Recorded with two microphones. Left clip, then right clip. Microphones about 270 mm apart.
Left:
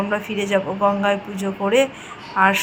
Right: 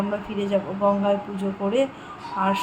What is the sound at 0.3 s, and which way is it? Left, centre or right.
Speech, centre.